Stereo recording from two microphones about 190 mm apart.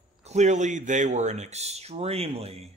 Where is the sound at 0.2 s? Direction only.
35° right (ahead or behind).